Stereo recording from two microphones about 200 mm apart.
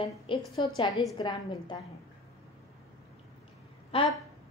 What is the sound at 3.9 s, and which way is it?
Speech, 30° left (ahead or behind).